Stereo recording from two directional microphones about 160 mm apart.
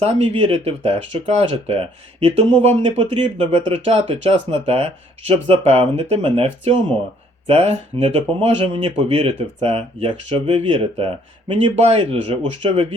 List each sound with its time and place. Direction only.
0.0 s speech: 35° right (ahead or behind)